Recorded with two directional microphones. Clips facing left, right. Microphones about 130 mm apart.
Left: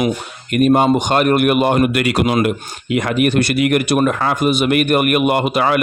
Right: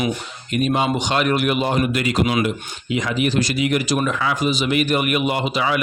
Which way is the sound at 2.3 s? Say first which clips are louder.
Left 4 dB; 55° left (ahead or behind).